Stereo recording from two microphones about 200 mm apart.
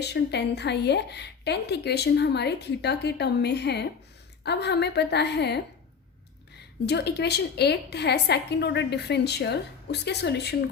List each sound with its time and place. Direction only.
0.0 s a woman's voice: 55° left (ahead or behind)
6.8 s a woman's voice: 55° left (ahead or behind)